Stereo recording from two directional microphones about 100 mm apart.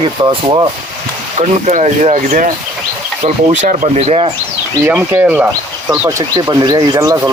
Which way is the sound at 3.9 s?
90° right.